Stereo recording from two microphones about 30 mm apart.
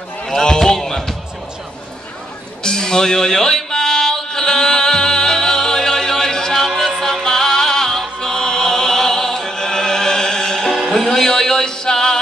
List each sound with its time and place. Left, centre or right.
0.3 s a sound: centre
0.7 s basketball bounce: centre
2.6 s music: left
6.7 s music: centre; by 10.7 s left
10.7 s music: centre
11.1 s a sound: left